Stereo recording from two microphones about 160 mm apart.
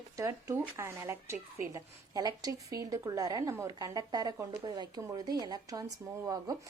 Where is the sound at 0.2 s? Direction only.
20° right (ahead or behind).